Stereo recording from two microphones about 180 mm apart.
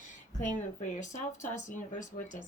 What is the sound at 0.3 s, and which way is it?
Speech, 45° left (ahead or behind).